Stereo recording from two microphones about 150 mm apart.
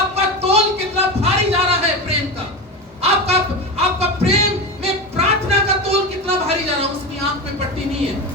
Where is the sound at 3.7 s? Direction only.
45° right (ahead or behind).